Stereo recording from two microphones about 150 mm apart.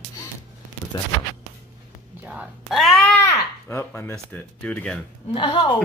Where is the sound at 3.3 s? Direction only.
15° left (ahead or behind).